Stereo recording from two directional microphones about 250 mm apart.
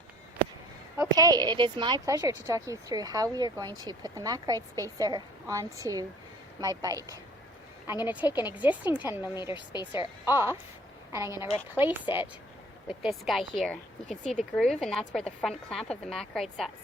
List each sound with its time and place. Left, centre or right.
0.9 s a woman's voice: centre
9.6 s speech: centre
10.2 s a woman's voice: centre